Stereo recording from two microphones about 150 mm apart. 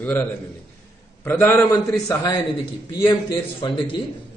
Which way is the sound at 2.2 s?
30° left (ahead or behind).